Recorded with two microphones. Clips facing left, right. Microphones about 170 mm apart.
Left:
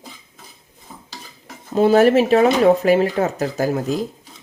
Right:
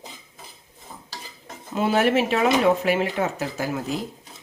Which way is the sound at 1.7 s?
40° left (ahead or behind).